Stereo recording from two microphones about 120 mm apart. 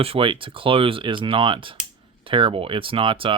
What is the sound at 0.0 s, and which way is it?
Speech, 50° right (ahead or behind).